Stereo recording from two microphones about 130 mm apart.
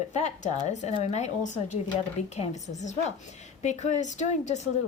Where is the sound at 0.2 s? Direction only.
65° left (ahead or behind).